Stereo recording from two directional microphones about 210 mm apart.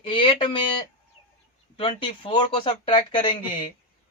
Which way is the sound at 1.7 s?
25° left (ahead or behind).